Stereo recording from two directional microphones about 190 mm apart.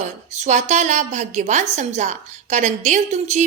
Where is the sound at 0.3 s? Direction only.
40° right (ahead or behind).